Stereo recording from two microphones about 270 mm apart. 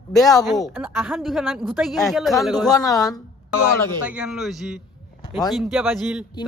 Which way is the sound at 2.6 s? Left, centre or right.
Centre.